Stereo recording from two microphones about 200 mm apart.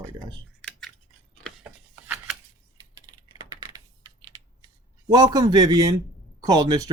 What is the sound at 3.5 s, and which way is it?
Typing, 20° right (ahead or behind).